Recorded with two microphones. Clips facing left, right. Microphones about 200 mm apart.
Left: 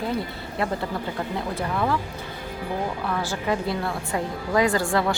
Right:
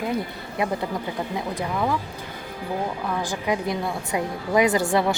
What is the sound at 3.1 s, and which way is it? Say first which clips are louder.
A woman's voice: right 1 dB; 15° right (ahead or behind).